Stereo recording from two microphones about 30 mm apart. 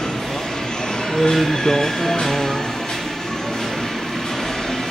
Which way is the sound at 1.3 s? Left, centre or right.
Centre.